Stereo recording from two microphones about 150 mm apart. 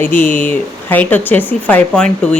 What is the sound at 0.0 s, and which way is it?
Speech, 15° left (ahead or behind).